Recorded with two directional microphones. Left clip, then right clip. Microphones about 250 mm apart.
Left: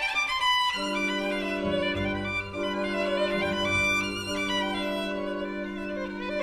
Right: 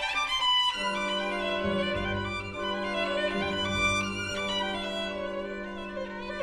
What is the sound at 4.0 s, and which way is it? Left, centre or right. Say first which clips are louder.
Music: left 2 dB; left.